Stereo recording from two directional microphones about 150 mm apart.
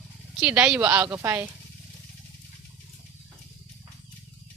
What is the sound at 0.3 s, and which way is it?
Speech, 5° right (ahead or behind).